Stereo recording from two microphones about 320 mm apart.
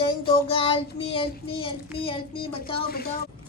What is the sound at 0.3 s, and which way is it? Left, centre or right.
Child singing, centre.